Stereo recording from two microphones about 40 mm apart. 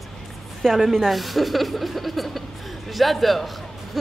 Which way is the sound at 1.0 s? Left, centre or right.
Centre.